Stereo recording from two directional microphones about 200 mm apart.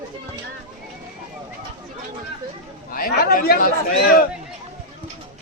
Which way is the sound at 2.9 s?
45° left (ahead or behind).